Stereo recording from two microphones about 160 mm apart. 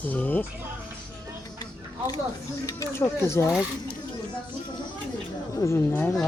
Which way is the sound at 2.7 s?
20° left (ahead or behind).